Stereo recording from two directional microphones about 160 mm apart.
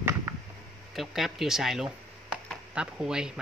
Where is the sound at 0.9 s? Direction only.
Centre (ahead or behind).